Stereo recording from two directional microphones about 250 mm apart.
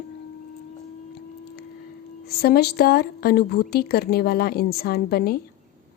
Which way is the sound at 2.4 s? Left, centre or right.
Left.